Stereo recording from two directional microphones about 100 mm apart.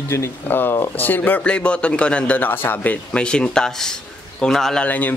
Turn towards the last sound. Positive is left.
turn(degrees=15)  # may be behind; listen again after turning